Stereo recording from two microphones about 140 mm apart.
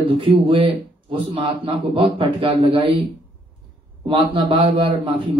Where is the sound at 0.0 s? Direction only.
40° right (ahead or behind).